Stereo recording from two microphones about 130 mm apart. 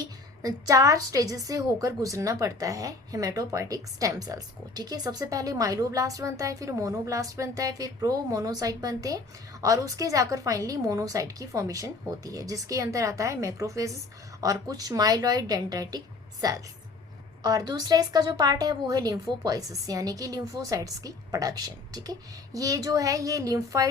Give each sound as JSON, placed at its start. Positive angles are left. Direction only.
{"t": 0.0, "sound": "a woman's voice", "side_deg": -30}